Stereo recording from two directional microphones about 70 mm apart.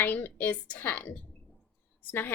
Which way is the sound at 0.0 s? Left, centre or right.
Left.